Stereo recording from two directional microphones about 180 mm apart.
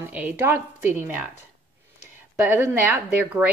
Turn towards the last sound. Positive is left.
turn(degrees=-10)  # may be behind; listen again after turning